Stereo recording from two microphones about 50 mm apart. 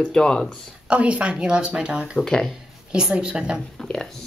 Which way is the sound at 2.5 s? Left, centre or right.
Centre.